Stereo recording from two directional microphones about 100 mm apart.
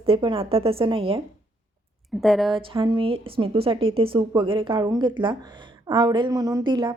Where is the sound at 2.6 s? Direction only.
60° right (ahead or behind).